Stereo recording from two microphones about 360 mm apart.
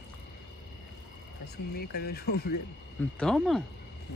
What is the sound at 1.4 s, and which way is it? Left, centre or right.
Speech, left.